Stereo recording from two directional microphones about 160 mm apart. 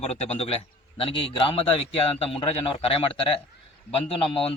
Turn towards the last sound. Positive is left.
turn(degrees=35)  # may be behind; listen again after turning